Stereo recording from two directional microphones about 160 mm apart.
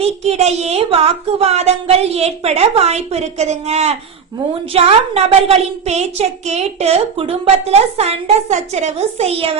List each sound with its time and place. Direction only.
0.0 s a woman's voice: 45° right (ahead or behind)